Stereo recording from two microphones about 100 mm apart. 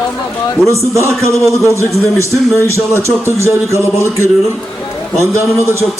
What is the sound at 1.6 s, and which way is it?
A man's voice, 30° left (ahead or behind).